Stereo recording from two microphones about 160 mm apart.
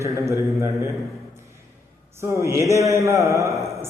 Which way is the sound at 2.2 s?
15° right (ahead or behind).